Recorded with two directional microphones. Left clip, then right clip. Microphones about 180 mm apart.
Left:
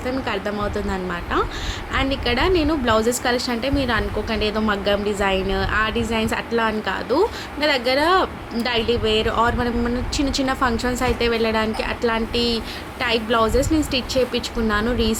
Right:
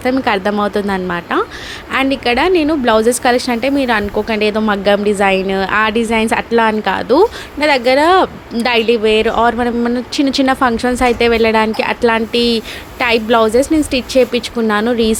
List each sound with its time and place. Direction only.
0.0 s a woman's voice: 50° right (ahead or behind)